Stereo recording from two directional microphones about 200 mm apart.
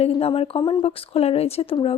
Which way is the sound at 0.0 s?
30° left (ahead or behind).